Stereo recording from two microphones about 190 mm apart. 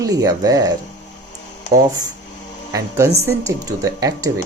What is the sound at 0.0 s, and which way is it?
Speech, 20° right (ahead or behind).